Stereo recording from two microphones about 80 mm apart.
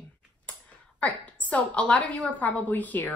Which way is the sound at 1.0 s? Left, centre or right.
Centre.